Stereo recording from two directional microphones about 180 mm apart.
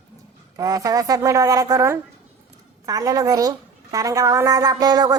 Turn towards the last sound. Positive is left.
turn(degrees=-20)  # may be behind; listen again after turning